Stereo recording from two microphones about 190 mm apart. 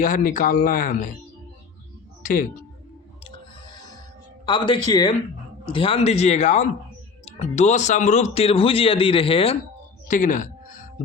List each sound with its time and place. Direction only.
0.0 s speech: 45° left (ahead or behind)
2.2 s speech: 45° left (ahead or behind)
4.4 s a man's voice: 25° left (ahead or behind)
10.1 s music: 45° left (ahead or behind)